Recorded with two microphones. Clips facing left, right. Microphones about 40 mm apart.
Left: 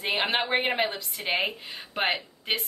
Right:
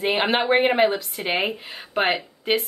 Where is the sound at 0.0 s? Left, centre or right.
Centre.